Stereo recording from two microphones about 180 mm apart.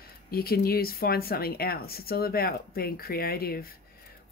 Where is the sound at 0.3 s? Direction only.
55° left (ahead or behind).